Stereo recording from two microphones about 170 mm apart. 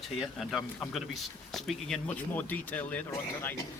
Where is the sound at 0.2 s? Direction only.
Centre (ahead or behind).